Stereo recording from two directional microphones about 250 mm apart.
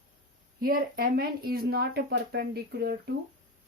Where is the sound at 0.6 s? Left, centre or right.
Right.